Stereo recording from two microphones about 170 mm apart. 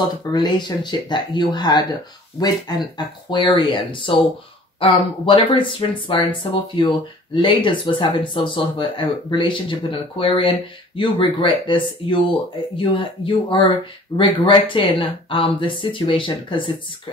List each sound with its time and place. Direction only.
0.3 s speech: 25° left (ahead or behind)